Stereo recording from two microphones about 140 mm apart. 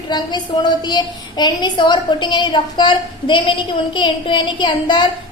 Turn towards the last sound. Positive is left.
turn(degrees=35)  # may be behind; listen again after turning